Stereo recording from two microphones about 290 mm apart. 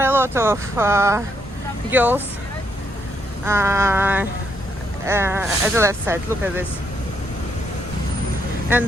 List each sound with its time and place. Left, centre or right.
0.0 s speech: centre
3.4 s speech: centre